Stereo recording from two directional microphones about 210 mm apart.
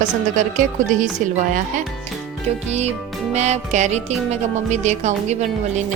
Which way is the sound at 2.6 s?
30° right (ahead or behind).